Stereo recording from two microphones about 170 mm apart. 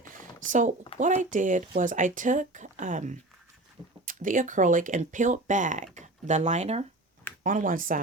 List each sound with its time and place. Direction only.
0.0 s a sound: 50° right (ahead or behind)
0.9 s speech: 45° right (ahead or behind)
7.4 s speech: 50° right (ahead or behind)